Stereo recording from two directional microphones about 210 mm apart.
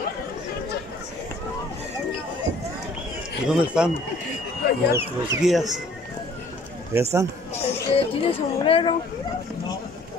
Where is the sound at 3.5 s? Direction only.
5° right (ahead or behind).